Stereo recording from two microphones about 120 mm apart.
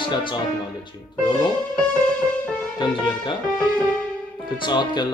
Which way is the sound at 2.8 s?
40° left (ahead or behind).